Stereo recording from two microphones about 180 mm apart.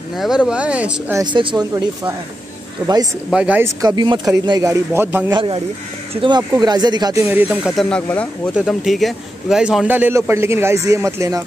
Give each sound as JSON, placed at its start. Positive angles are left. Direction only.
{"t": 0.2, "sound": "a man's voice", "side_deg": -5}
{"t": 1.2, "sound": "speech", "side_deg": -25}
{"t": 2.8, "sound": "a man's voice", "side_deg": -10}
{"t": 3.8, "sound": "speech", "side_deg": -25}
{"t": 5.3, "sound": "speech", "side_deg": -30}
{"t": 7.2, "sound": "a man's voice", "side_deg": -10}
{"t": 7.7, "sound": "a man's voice", "side_deg": 5}